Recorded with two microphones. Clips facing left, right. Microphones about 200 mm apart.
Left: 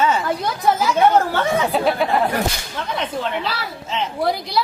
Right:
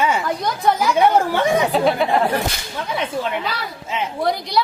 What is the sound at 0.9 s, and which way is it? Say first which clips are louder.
Speech: even; 15° right (ahead or behind).